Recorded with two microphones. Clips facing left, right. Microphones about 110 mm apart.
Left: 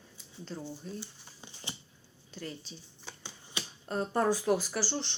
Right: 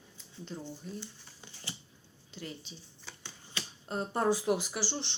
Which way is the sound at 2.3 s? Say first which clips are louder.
Left 2 dB; 20° right (ahead or behind).